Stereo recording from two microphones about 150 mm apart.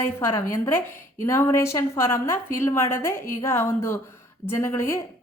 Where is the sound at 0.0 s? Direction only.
15° left (ahead or behind).